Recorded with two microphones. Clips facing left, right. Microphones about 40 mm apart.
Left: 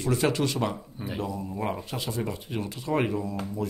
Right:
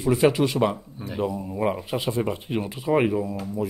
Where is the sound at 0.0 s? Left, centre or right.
Centre; by 2.7 s right.